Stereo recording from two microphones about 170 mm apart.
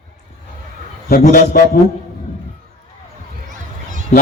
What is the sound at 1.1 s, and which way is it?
Speech, 60° left (ahead or behind).